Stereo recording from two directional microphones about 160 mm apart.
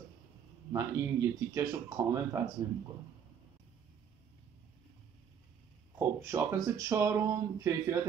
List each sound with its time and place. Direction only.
0.7 s speech: 20° right (ahead or behind)
5.9 s speech: 15° right (ahead or behind)